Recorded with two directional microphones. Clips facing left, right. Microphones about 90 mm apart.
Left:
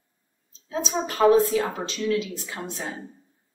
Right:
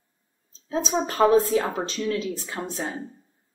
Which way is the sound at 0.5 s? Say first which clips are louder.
Right 3 dB; 35° right (ahead or behind).